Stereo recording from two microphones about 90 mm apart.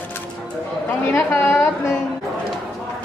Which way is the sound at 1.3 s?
30° left (ahead or behind).